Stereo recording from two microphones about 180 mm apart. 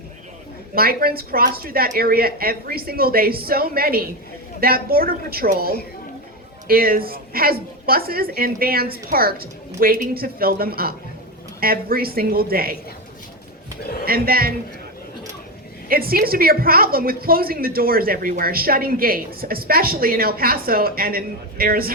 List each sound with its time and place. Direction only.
0.8 s a woman's voice: 55° right (ahead or behind)
14.0 s a woman's voice: 55° right (ahead or behind)
15.9 s a woman's voice: 55° right (ahead or behind)